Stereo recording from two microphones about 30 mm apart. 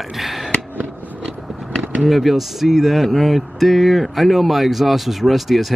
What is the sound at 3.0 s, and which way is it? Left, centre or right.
Speech, centre.